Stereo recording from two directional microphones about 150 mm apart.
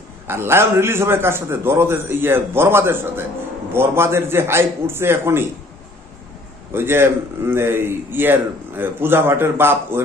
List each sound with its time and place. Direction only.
0.3 s a man's voice: 15° right (ahead or behind)
6.7 s a man's voice: 15° right (ahead or behind)